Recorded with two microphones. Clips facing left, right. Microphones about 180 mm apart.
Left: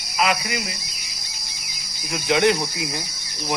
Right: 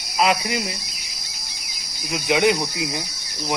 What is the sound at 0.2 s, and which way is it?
Cricket, 35° right (ahead or behind).